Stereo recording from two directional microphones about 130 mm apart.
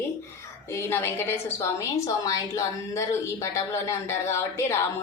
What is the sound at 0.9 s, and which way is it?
A woman's voice, 20° left (ahead or behind).